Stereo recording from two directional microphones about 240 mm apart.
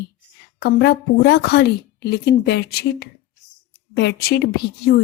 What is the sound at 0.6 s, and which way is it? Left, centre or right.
Speech, left.